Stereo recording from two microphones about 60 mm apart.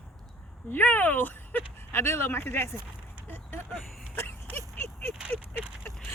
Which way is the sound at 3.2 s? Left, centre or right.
Left.